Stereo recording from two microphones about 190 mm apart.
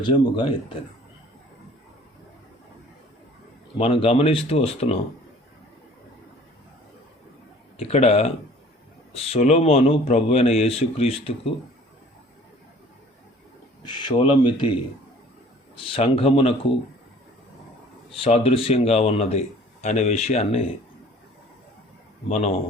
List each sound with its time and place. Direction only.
0.0 s speech: 25° left (ahead or behind)
3.8 s a man's voice: 30° left (ahead or behind)
7.8 s a man's voice: 30° left (ahead or behind)
13.8 s speech: 25° left (ahead or behind)
15.8 s a man's voice: 30° left (ahead or behind)
18.1 s a man's voice: 30° left (ahead or behind)
22.3 s a man's voice: 35° left (ahead or behind)